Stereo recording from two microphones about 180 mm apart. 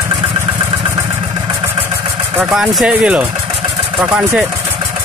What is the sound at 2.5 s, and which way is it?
Speech, 5° right (ahead or behind).